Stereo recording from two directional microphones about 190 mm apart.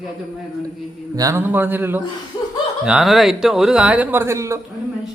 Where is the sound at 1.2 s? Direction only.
15° right (ahead or behind).